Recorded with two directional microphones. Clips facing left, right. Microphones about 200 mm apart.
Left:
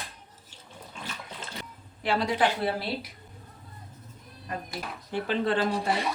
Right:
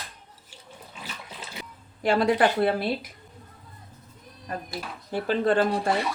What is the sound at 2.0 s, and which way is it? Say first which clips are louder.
Speech: right 5 dB; 50° right (ahead or behind).